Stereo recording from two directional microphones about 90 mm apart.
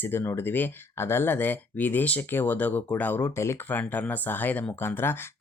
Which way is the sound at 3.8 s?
20° left (ahead or behind).